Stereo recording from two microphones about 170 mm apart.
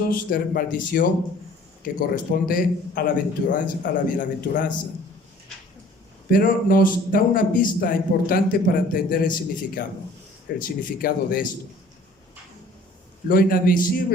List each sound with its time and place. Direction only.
0.0 s a man's voice: 60° left (ahead or behind)
6.3 s a man's voice: 55° left (ahead or behind)
13.2 s a man's voice: 55° left (ahead or behind)